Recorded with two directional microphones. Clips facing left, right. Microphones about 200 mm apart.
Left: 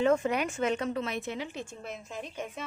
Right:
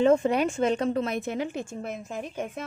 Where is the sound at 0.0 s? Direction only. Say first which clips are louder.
Right 5 dB; 30° right (ahead or behind).